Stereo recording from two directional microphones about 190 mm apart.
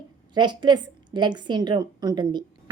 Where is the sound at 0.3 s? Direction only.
25° right (ahead or behind).